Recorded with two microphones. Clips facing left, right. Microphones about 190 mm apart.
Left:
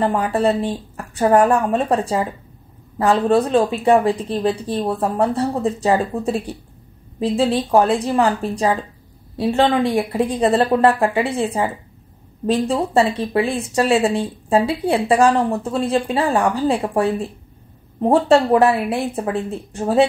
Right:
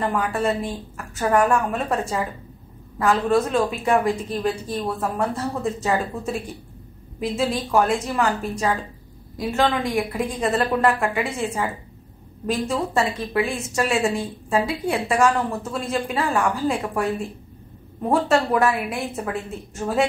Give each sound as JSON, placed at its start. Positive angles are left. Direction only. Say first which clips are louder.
{"t": 0.0, "sound": "speech", "louder": "left 5 dB", "side_deg": 30}